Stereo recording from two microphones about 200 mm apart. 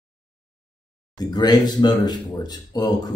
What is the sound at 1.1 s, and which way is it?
Speech, 20° left (ahead or behind).